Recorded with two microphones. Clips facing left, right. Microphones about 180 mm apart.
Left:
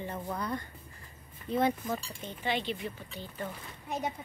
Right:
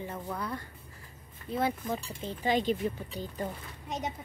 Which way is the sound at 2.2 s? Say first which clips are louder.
Right 5 dB; 35° right (ahead or behind).